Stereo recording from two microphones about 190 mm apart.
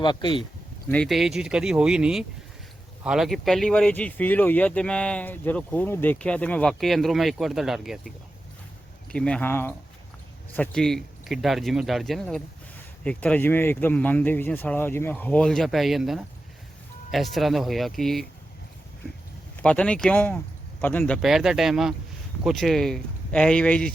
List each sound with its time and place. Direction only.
0.0 s speech: 25° left (ahead or behind)
0.9 s speech: 5° left (ahead or behind)
9.1 s speech: 5° left (ahead or behind)
19.6 s speech: 5° left (ahead or behind)